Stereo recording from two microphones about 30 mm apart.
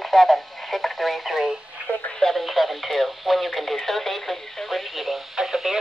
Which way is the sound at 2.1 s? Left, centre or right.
Centre.